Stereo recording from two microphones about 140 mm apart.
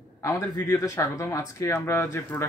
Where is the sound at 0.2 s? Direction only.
25° left (ahead or behind).